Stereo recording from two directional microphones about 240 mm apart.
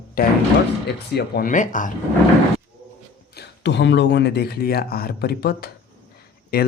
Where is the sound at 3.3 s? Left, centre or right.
Left.